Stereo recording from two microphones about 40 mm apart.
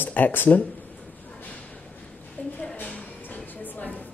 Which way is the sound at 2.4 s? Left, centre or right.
Left.